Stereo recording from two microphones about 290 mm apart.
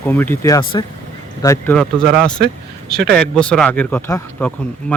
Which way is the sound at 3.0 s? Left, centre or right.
Centre.